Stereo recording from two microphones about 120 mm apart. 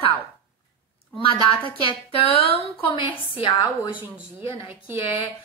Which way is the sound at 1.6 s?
45° left (ahead or behind).